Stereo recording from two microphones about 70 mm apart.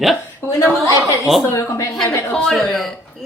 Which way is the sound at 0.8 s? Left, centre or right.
Left.